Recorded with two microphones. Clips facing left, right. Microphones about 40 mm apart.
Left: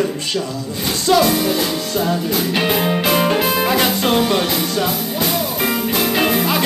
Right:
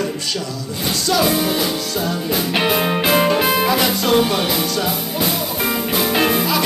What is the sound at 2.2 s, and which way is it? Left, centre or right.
Music, centre.